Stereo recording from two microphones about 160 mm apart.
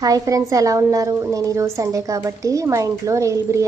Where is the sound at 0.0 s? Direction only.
20° right (ahead or behind).